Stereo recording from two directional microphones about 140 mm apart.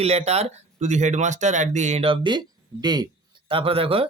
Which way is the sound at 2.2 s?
30° right (ahead or behind).